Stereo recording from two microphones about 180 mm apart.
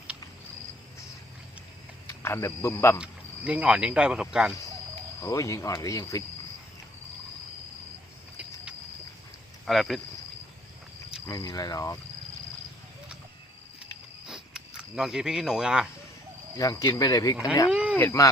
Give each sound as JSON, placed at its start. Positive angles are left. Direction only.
{"t": 2.0, "sound": "speech", "side_deg": 15}
{"t": 3.0, "sound": "speech", "side_deg": -5}
{"t": 5.2, "sound": "speech", "side_deg": 15}
{"t": 9.6, "sound": "speech", "side_deg": 0}
{"t": 11.3, "sound": "speech", "side_deg": 20}
{"t": 14.3, "sound": "cricket", "side_deg": -5}
{"t": 16.6, "sound": "speech", "side_deg": 20}
{"t": 17.7, "sound": "a sound", "side_deg": -5}
{"t": 17.9, "sound": "speech", "side_deg": 15}